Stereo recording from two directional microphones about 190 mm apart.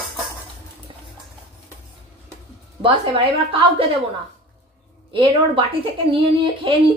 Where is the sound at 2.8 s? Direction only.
30° right (ahead or behind).